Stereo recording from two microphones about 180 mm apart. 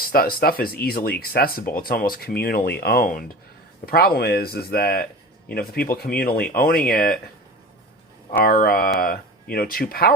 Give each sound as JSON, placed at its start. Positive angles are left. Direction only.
{"t": 0.0, "sound": "speech", "side_deg": 55}
{"t": 8.4, "sound": "speech", "side_deg": 55}